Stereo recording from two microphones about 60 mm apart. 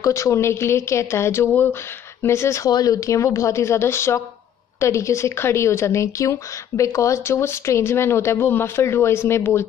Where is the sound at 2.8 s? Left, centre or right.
Left.